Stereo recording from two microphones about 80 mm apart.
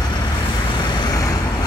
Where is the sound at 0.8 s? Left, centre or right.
Left.